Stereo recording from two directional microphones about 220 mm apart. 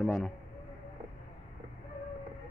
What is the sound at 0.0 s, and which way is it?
Speech, centre (ahead or behind).